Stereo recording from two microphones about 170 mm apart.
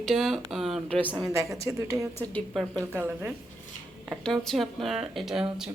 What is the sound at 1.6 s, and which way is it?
Speech, 20° right (ahead or behind).